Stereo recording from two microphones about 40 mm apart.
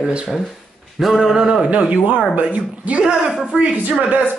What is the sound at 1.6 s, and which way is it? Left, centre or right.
A woman's voice, right.